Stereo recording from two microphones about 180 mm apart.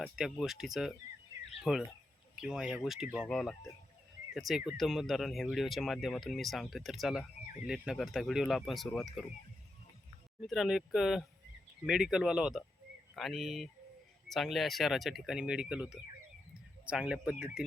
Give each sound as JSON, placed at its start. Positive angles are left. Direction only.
{"t": 0.0, "sound": "speech", "side_deg": 0}
{"t": 10.4, "sound": "speech", "side_deg": 0}